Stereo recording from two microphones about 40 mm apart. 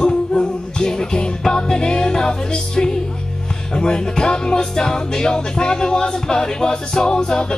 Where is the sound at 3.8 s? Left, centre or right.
Centre.